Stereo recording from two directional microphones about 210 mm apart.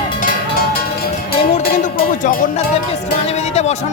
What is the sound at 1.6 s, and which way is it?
Music, 40° left (ahead or behind).